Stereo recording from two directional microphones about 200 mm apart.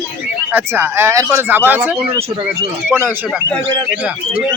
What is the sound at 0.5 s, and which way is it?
Speech, 10° right (ahead or behind).